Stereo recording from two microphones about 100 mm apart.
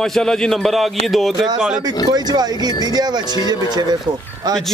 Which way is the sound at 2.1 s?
45° right (ahead or behind).